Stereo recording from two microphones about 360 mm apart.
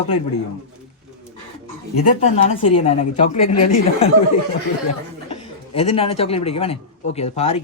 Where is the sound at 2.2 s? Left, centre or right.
Centre.